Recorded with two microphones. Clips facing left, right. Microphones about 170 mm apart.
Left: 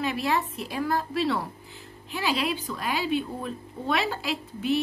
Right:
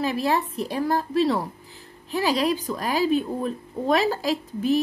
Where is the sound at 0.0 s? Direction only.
35° right (ahead or behind).